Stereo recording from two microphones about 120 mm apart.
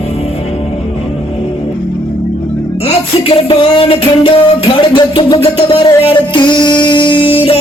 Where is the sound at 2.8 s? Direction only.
50° left (ahead or behind).